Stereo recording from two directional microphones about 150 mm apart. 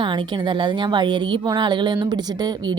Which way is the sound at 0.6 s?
30° right (ahead or behind).